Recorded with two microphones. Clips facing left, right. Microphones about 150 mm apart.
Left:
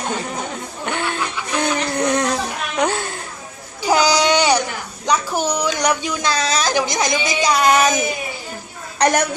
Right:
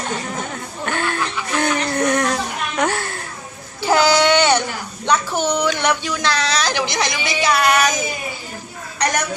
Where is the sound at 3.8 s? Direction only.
15° left (ahead or behind).